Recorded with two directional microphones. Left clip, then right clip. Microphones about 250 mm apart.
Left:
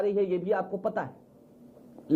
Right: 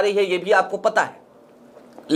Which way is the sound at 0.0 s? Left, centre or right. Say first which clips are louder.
Right 8 dB; centre.